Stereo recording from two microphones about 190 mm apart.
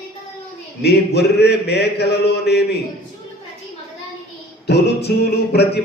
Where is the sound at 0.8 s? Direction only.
60° left (ahead or behind).